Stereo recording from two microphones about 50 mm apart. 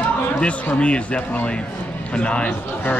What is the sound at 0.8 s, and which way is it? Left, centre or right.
Speech, left.